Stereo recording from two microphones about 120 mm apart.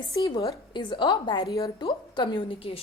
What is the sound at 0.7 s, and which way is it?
A woman's voice, 40° left (ahead or behind).